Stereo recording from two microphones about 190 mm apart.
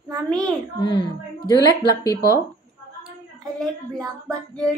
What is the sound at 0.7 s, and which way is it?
Speech, 25° left (ahead or behind).